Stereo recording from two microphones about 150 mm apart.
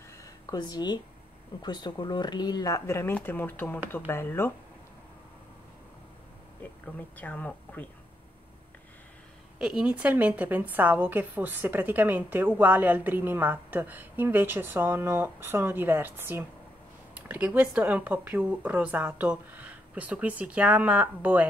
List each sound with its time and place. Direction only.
0.2 s a sound: 25° left (ahead or behind)
1.6 s a woman's voice: 30° left (ahead or behind)
7.2 s a woman's voice: 10° left (ahead or behind)
9.6 s a woman's voice: 5° right (ahead or behind)